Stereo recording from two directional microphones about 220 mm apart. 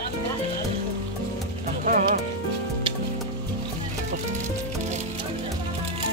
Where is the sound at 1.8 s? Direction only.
35° right (ahead or behind).